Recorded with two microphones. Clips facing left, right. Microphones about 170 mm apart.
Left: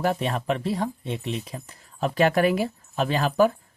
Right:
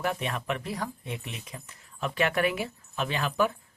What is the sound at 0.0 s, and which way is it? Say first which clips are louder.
Speech: left 6 dB; 35° left (ahead or behind).